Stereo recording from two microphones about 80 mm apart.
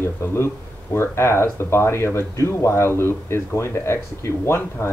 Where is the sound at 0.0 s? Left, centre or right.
Left.